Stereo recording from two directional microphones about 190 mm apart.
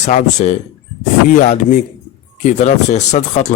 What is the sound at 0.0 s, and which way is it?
Speech, 40° left (ahead or behind).